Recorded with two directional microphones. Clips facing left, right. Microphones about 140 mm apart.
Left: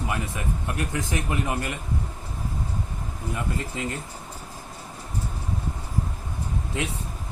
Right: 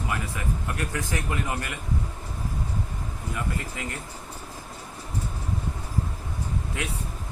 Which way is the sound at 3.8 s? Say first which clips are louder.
Left 4 dB; 25° left (ahead or behind).